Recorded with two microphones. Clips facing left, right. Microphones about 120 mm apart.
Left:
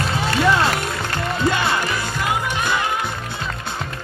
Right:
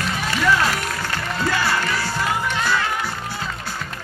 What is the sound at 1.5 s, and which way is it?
Music, 20° left (ahead or behind).